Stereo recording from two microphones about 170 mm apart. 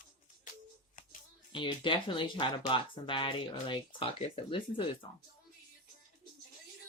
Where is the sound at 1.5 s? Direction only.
30° left (ahead or behind).